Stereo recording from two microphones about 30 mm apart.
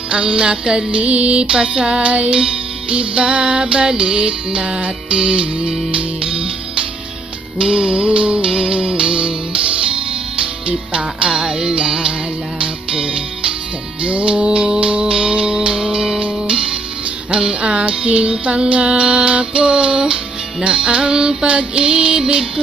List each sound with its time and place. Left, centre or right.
0.1 s music: right
14.0 s music: right
16.2 s music: right
21.5 s music: right